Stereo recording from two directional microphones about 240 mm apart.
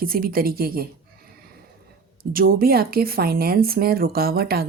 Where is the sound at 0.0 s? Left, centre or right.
Right.